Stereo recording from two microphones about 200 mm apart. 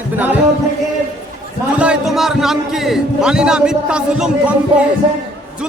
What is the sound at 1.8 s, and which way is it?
A man's voice, 5° right (ahead or behind).